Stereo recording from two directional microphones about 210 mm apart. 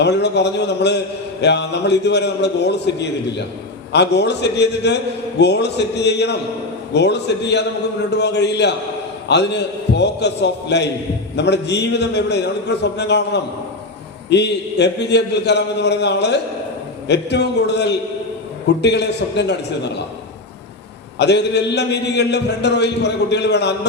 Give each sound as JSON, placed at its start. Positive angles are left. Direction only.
{"t": 0.0, "sound": "a man's voice", "side_deg": 55}
{"t": 21.2, "sound": "a man's voice", "side_deg": 55}